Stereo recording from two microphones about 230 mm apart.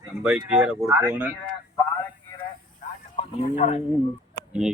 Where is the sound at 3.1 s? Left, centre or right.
Left.